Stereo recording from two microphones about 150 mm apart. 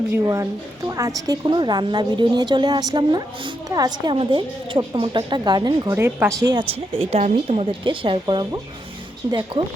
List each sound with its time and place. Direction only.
0.1 s a woman's voice: 20° right (ahead or behind)